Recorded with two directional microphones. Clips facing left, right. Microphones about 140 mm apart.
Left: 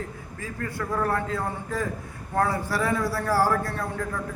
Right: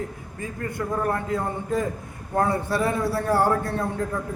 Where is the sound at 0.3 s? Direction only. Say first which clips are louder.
Right 2 dB; 20° right (ahead or behind).